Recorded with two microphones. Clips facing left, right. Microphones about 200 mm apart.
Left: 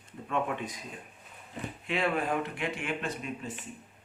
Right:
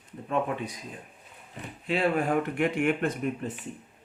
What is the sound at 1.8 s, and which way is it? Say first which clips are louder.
Speech: right 4 dB; 35° right (ahead or behind).